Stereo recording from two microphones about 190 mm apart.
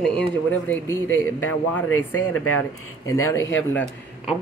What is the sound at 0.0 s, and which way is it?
Speech, 5° left (ahead or behind).